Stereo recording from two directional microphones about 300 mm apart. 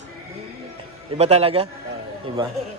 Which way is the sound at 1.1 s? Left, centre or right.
Centre.